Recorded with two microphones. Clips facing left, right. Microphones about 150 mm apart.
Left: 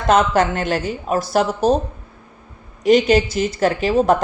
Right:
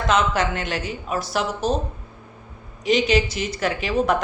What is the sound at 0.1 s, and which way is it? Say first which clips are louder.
A woman's voice: left 6 dB; 50° left (ahead or behind).